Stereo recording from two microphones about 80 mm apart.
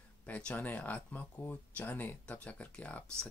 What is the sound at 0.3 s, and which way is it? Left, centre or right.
Speech, centre.